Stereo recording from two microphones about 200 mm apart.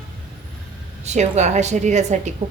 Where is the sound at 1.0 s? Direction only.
35° right (ahead or behind).